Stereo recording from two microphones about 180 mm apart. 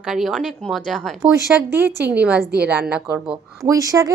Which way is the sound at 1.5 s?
10° right (ahead or behind).